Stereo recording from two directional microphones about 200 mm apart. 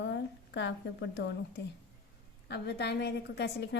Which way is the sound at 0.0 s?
60° left (ahead or behind).